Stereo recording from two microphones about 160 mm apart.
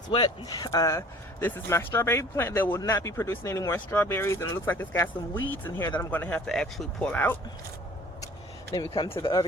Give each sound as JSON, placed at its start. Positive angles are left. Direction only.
{"t": 0.1, "sound": "speech", "side_deg": 25}
{"t": 8.7, "sound": "speech", "side_deg": 30}